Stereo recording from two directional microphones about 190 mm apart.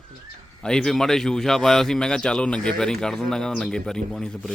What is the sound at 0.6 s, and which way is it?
A man's voice, 5° left (ahead or behind).